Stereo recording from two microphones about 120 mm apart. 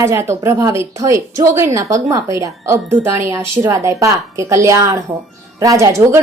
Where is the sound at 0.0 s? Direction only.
20° right (ahead or behind).